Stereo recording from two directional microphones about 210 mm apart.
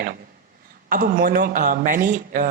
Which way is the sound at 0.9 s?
40° right (ahead or behind).